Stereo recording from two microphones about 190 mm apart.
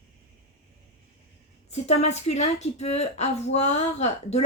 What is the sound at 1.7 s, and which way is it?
Speech, 35° left (ahead or behind).